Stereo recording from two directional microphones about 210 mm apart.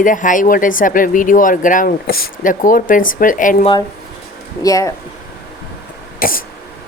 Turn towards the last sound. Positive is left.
turn(degrees=45)  # may be behind; listen again after turning